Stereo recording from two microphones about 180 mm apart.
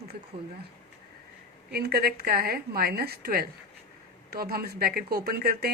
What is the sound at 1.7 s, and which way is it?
A woman's voice, 60° right (ahead or behind).